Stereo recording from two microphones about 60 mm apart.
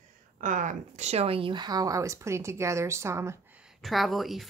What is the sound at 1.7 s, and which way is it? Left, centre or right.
Speech, right.